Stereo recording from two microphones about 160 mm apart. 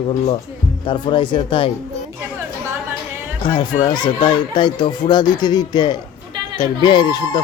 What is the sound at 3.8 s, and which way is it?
Speech, 25° left (ahead or behind).